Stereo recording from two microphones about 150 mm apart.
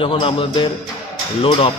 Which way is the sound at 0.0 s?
35° left (ahead or behind).